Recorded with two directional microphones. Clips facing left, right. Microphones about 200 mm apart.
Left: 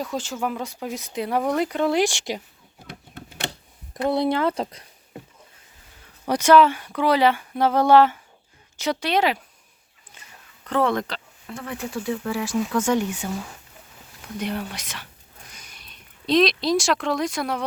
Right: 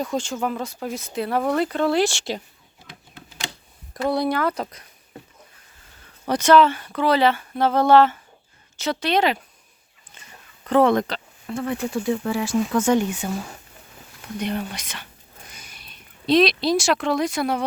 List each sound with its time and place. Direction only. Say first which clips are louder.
0.0 s speech: right 2 dB; 5° left (ahead or behind)
3.2 s a sound: left 3 dB; 60° left (ahead or behind)
3.9 s speech: even; 25° left (ahead or behind)
6.2 s speech: even; 10° left (ahead or behind)
10.1 s whispering: right 1 dB; 10° left (ahead or behind)
10.7 s speech: right 5 dB; 20° right (ahead or behind)
11.4 s speech: right 7 dB; 30° right (ahead or behind)
14.3 s speech: right 2 dB; 5° left (ahead or behind)
15.4 s a sound: right 2 dB; 5° right (ahead or behind)